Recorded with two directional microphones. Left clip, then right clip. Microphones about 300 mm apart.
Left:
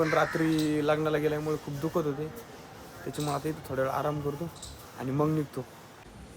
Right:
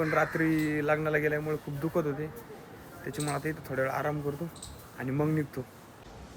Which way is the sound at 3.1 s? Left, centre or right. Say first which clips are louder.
Left 1 dB; centre.